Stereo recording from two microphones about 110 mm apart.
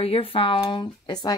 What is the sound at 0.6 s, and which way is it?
Speech, 40° left (ahead or behind).